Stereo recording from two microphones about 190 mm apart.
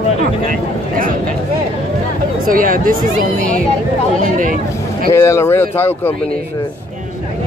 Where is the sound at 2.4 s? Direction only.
45° right (ahead or behind).